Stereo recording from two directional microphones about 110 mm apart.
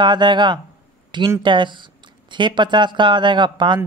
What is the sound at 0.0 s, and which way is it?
Speech, 45° right (ahead or behind).